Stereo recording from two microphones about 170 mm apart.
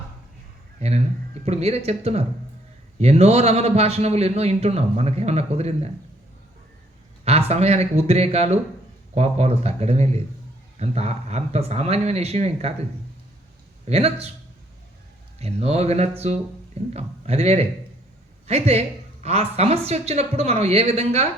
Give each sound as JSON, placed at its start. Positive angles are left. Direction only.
{"t": 0.8, "sound": "a man's voice", "side_deg": -40}
{"t": 7.3, "sound": "a man's voice", "side_deg": -35}
{"t": 13.8, "sound": "a man's voice", "side_deg": -35}
{"t": 15.4, "sound": "a man's voice", "side_deg": -40}